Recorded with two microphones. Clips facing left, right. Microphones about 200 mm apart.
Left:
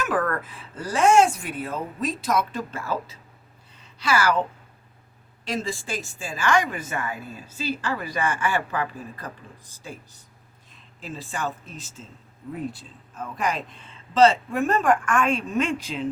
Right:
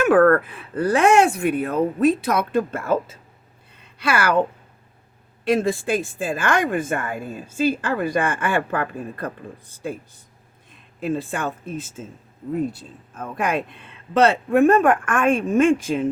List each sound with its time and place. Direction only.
0.0 s speech: 60° right (ahead or behind)
3.7 s a sound: 55° right (ahead or behind)
5.5 s a woman's voice: 60° right (ahead or behind)